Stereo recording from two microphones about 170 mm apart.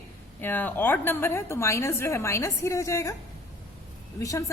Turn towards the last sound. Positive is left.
turn(degrees=20)  # may be behind; listen again after turning